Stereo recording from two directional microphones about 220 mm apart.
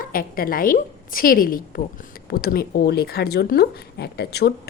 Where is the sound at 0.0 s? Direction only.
40° left (ahead or behind).